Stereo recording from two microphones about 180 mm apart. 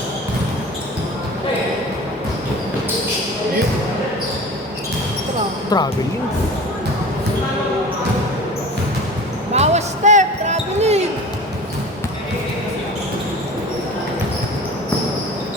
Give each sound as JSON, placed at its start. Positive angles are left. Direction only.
{"t": 5.7, "sound": "speech", "side_deg": 20}
{"t": 9.6, "sound": "basketball bounce", "side_deg": -40}